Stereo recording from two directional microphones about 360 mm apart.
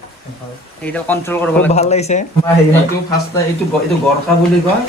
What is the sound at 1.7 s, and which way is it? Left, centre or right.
Speech, centre.